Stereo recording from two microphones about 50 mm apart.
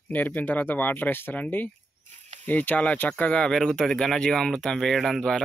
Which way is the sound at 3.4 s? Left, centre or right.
Centre.